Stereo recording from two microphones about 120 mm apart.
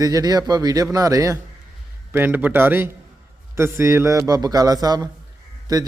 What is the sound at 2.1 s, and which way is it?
A man's voice, 15° right (ahead or behind).